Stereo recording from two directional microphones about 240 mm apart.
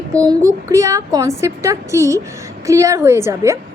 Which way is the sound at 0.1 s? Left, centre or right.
Centre.